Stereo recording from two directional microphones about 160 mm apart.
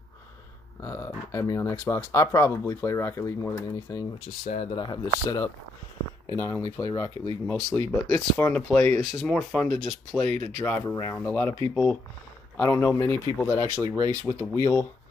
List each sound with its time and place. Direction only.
0.8 s speech: 20° left (ahead or behind)
4.5 s speech: 35° left (ahead or behind); by 7.1 s 20° left (ahead or behind)
7.4 s speech: 10° left (ahead or behind)
13.7 s speech: 20° right (ahead or behind)
14.2 s speech: 15° left (ahead or behind)